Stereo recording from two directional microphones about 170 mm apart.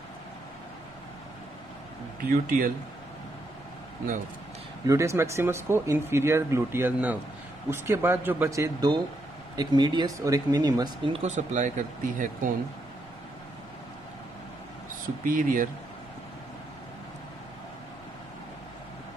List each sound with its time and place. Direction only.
2.2 s speech: 55° right (ahead or behind)
4.8 s speech: 15° right (ahead or behind); by 12.5 s 50° right (ahead or behind)
15.2 s speech: 55° right (ahead or behind)